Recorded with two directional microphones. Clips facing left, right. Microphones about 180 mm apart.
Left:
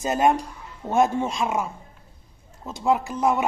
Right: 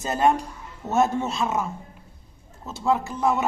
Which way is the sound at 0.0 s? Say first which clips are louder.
Left 1 dB; 15° left (ahead or behind).